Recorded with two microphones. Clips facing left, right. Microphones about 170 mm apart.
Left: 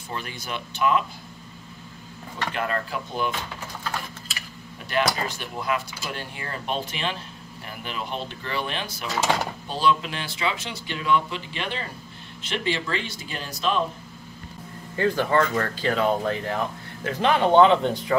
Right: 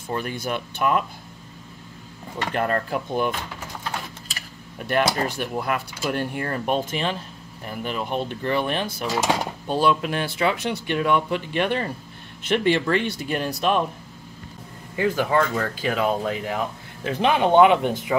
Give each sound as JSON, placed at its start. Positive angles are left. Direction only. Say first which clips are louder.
{"t": 0.1, "sound": "speech", "louder": "right 6 dB", "side_deg": -50}
{"t": 2.5, "sound": "speech", "louder": "right 5 dB", "side_deg": -45}
{"t": 5.4, "sound": "speech", "louder": "right 3 dB", "side_deg": -55}
{"t": 9.1, "sound": "speech", "louder": "right 1 dB", "side_deg": -15}
{"t": 9.7, "sound": "speech", "louder": "right 3 dB", "side_deg": -50}
{"t": 15.0, "sound": "speech", "louder": "right 1 dB", "side_deg": -10}